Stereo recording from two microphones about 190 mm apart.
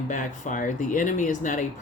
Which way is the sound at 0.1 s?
40° left (ahead or behind).